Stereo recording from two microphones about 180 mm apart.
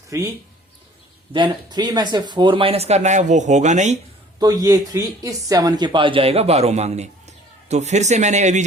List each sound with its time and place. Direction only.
0.1 s speech: 15° right (ahead or behind)
1.3 s speech: 25° right (ahead or behind); by 3.9 s 40° right (ahead or behind)
4.4 s speech: 20° right (ahead or behind); by 8.6 s 40° right (ahead or behind)